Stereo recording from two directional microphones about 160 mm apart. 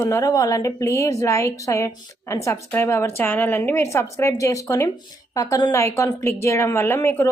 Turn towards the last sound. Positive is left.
turn(degrees=15)  # may be behind; listen again after turning